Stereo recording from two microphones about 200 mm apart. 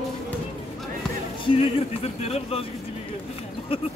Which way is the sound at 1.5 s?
30° left (ahead or behind).